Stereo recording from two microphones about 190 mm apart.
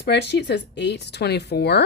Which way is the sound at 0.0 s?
60° left (ahead or behind).